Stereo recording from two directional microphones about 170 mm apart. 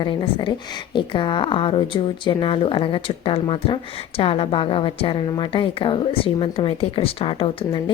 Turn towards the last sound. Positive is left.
turn(degrees=30)  # may be behind; listen again after turning